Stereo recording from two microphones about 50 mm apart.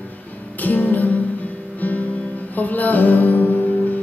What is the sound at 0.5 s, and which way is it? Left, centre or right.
Music, left.